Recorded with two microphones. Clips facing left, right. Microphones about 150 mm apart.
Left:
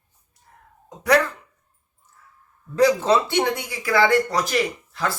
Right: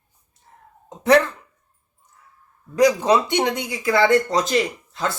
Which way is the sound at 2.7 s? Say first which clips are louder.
Right 1 dB; 15° right (ahead or behind).